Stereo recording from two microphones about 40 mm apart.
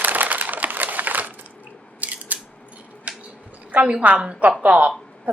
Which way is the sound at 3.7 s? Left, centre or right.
Right.